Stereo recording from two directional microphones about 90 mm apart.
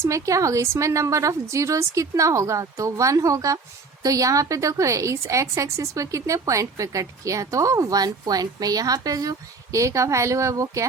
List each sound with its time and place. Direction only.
0.0 s a woman's voice: 35° right (ahead or behind)